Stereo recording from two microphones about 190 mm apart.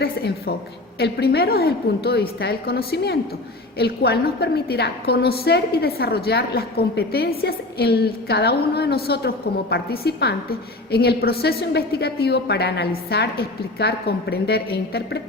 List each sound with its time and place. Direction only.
0.0 s a woman's voice: 55° left (ahead or behind)